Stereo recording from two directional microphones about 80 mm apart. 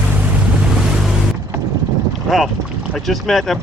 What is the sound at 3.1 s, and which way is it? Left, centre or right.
Speech, centre.